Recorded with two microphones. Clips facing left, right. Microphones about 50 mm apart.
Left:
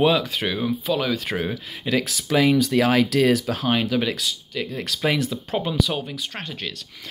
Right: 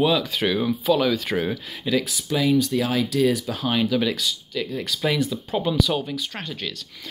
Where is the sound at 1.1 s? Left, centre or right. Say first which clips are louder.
Right 1 dB; left.